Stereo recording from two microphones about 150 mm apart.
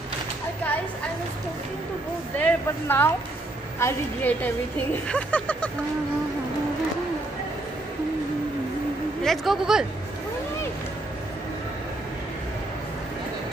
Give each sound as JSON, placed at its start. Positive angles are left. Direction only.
{"t": 2.3, "sound": "a woman's voice", "side_deg": 10}
{"t": 9.2, "sound": "speech", "side_deg": 0}